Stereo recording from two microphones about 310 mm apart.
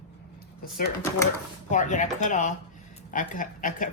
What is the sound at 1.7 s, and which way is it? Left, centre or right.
Speech, left.